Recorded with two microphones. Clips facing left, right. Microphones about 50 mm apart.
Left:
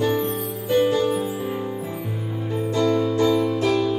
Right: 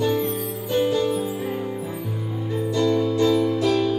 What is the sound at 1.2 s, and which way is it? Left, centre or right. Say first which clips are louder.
Music: even; centre.